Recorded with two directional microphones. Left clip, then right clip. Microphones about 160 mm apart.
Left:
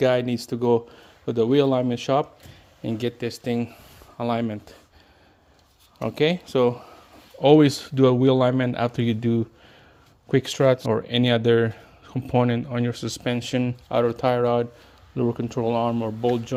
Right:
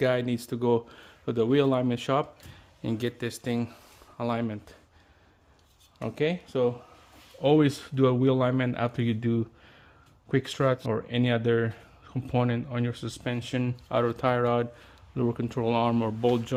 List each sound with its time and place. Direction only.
0.0 s speech: 10° left (ahead or behind)
6.0 s speech: 25° left (ahead or behind)
7.4 s speech: 25° left (ahead or behind)
13.7 s speech: 5° left (ahead or behind)